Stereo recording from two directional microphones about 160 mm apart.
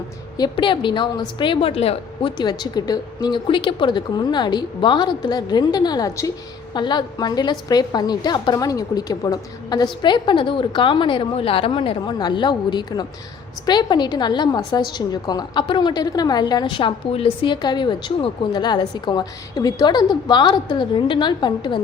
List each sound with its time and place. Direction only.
0.3 s a woman's voice: 30° left (ahead or behind)